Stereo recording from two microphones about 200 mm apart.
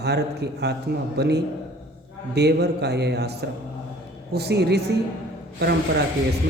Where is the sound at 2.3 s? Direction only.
55° right (ahead or behind).